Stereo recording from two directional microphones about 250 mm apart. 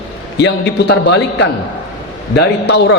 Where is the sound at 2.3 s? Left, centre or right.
Left.